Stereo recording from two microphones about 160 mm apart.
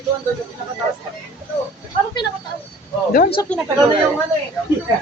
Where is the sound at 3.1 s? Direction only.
65° left (ahead or behind).